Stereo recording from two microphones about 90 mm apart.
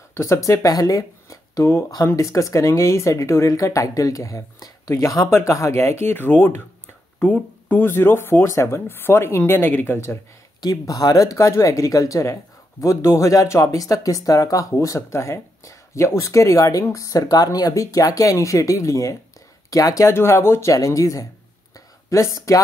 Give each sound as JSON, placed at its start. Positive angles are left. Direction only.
{"t": 0.1, "sound": "speech", "side_deg": 35}
{"t": 7.6, "sound": "speech", "side_deg": 25}
{"t": 10.6, "sound": "speech", "side_deg": 45}
{"t": 21.7, "sound": "a sound", "side_deg": 35}